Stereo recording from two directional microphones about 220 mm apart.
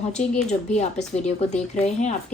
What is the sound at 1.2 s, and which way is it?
Speech, 30° left (ahead or behind).